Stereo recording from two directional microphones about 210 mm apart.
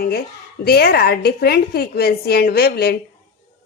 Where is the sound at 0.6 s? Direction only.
50° left (ahead or behind).